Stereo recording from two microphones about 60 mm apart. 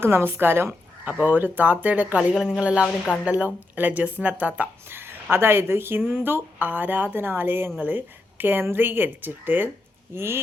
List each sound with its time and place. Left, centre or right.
0.0 s a woman's voice: right
2.4 s speech: centre
4.9 s speech: right
6.0 s speech: centre
6.2 s a woman's voice: right
10.2 s speech: right